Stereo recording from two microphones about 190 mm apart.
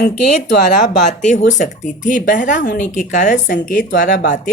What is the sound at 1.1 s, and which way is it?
Speech, 40° left (ahead or behind).